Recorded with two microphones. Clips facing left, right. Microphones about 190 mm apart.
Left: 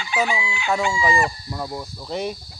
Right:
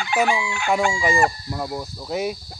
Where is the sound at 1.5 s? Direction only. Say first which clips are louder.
Right 2 dB; 5° right (ahead or behind).